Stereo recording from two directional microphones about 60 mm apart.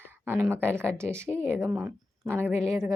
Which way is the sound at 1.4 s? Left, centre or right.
Right.